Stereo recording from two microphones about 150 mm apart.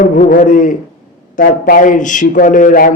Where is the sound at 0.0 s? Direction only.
60° left (ahead or behind).